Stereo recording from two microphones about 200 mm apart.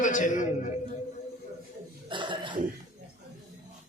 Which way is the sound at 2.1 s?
25° right (ahead or behind).